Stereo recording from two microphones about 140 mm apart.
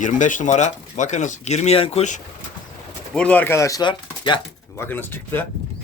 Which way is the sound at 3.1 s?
10° left (ahead or behind).